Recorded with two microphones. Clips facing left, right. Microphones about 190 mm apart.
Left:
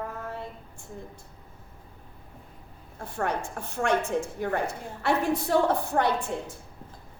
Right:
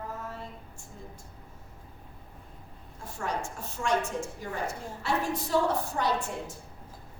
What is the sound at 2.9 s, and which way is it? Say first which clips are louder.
A woman's voice: left 4 dB; 60° left (ahead or behind).